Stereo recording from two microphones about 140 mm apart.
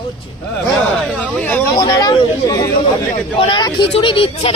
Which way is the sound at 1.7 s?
30° left (ahead or behind).